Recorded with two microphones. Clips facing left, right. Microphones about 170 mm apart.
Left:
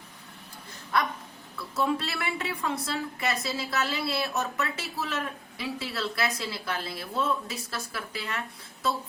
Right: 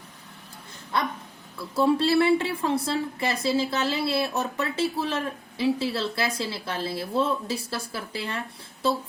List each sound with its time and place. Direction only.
0.9 s speech: 25° right (ahead or behind)